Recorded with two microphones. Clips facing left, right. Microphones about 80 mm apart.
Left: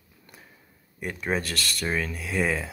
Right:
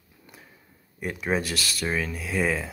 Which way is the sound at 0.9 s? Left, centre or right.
Centre.